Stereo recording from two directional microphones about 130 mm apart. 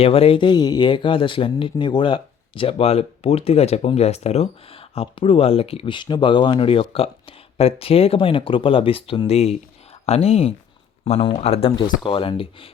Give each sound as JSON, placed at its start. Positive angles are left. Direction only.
{"t": 0.0, "sound": "speech", "side_deg": 45}
{"t": 11.8, "sound": "speech", "side_deg": 35}